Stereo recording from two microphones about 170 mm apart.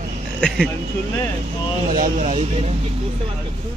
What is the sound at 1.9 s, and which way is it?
Speech, 55° right (ahead or behind).